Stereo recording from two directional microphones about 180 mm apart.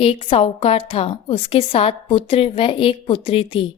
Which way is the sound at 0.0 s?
30° left (ahead or behind).